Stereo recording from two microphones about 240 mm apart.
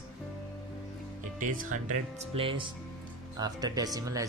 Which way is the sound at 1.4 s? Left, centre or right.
Right.